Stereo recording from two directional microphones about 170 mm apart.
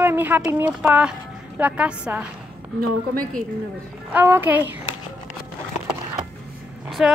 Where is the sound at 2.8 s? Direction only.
55° right (ahead or behind).